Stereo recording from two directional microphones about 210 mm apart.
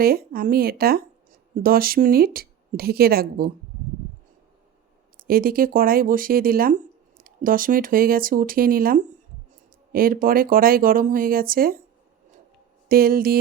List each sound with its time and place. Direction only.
0.0 s speech: 45° right (ahead or behind)
5.1 s speech: 45° right (ahead or behind)
12.9 s speech: 45° right (ahead or behind)